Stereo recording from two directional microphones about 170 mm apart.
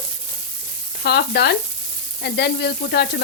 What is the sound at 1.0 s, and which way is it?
Sizzle, 70° left (ahead or behind).